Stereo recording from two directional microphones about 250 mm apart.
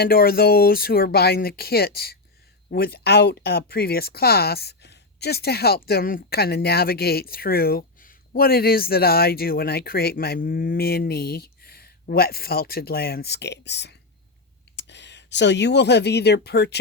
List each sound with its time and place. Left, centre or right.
0.0 s speech: left